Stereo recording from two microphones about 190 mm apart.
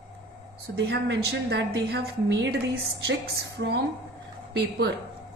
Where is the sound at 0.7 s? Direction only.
70° right (ahead or behind).